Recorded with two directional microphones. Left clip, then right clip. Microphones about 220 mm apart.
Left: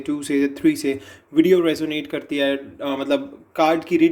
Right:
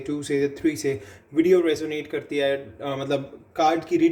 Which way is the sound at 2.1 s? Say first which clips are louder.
Left 1 dB; 35° left (ahead or behind).